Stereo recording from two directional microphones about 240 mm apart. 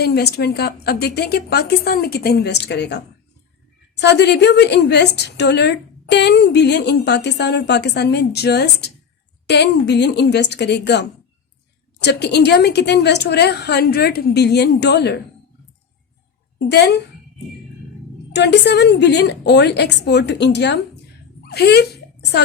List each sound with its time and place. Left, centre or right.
0.0 s a woman's voice: left
16.6 s a woman's voice: left
18.3 s a woman's voice: left